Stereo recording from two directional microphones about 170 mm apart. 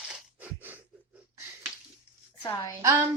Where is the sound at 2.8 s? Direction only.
20° right (ahead or behind).